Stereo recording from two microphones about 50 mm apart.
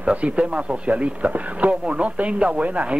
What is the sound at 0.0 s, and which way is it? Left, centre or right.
A man's voice, right.